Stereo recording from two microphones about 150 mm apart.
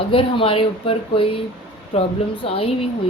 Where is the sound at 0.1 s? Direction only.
35° left (ahead or behind).